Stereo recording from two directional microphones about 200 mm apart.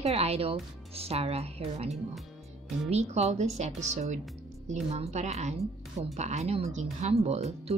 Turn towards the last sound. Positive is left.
turn(degrees=-30)  # may be behind; listen again after turning